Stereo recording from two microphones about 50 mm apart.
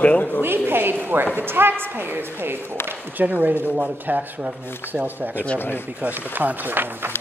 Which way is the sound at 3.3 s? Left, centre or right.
Right.